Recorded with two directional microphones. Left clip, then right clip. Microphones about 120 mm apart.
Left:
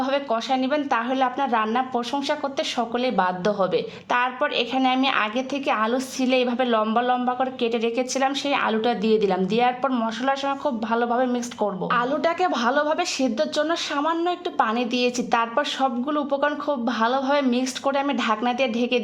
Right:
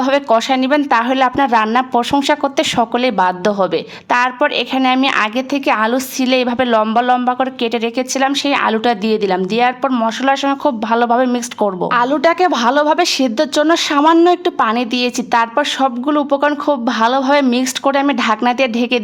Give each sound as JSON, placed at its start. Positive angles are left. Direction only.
{"t": 0.0, "sound": "speech", "side_deg": -40}